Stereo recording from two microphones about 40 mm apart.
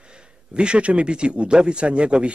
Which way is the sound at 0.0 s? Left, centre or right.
Right.